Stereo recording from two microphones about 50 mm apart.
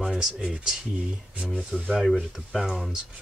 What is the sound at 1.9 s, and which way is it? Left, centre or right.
Speech, centre.